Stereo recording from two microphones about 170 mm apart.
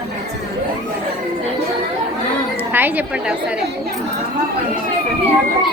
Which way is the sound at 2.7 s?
10° right (ahead or behind).